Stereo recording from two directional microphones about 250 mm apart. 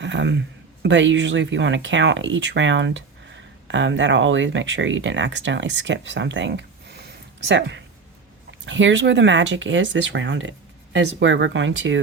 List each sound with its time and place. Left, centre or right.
0.0 s a man's voice: right